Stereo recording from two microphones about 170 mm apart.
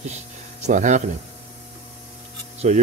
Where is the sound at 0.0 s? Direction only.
40° right (ahead or behind).